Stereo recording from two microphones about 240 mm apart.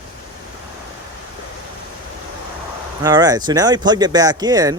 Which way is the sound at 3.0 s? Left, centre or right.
Centre.